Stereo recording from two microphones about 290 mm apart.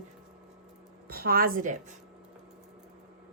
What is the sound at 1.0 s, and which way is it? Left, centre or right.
Speech, right.